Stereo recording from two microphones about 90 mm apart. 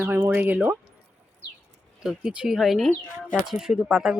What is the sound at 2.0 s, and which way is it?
Speech, 10° right (ahead or behind).